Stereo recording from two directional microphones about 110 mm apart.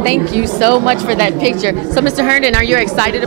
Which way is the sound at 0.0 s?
15° right (ahead or behind).